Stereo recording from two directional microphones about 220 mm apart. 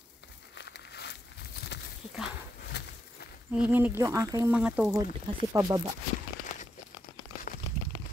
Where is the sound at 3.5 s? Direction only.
5° right (ahead or behind).